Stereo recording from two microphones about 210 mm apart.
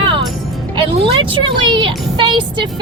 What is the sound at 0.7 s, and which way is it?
Speech, 25° right (ahead or behind).